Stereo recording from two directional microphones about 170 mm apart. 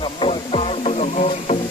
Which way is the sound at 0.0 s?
30° left (ahead or behind).